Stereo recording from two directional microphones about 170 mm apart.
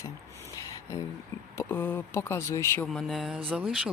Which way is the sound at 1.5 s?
10° left (ahead or behind).